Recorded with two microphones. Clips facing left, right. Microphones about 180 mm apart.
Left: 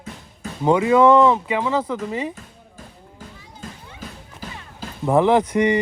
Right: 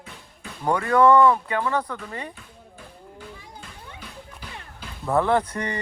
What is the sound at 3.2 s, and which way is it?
Children playing, 45° left (ahead or behind).